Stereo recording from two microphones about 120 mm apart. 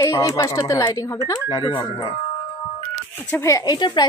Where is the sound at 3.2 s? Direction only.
20° left (ahead or behind); by 4.0 s 35° left (ahead or behind).